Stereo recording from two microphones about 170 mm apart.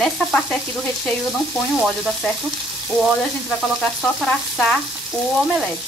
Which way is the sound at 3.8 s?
Centre (ahead or behind).